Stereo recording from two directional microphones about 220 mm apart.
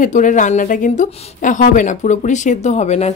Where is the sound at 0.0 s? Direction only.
35° left (ahead or behind).